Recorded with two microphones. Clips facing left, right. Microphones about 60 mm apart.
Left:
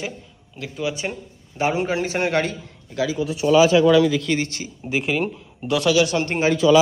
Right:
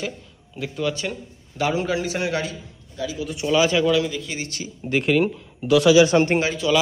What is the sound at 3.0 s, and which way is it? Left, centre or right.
Speech, left.